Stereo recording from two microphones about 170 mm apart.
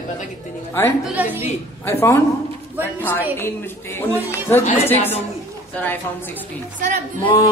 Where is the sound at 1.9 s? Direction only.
15° left (ahead or behind).